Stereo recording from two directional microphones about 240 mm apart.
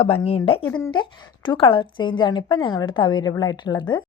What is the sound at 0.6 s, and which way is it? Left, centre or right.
Speech, centre.